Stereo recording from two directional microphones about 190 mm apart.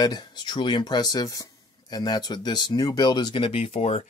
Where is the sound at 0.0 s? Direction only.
20° left (ahead or behind).